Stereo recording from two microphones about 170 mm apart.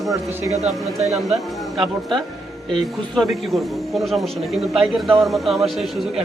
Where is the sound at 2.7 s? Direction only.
Centre (ahead or behind).